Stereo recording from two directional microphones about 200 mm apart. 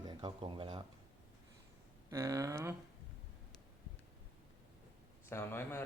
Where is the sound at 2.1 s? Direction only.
15° right (ahead or behind).